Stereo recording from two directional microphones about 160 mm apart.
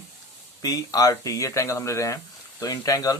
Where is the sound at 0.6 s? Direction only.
20° left (ahead or behind).